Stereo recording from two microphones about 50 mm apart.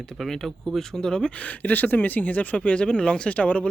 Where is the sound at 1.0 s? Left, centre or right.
Centre.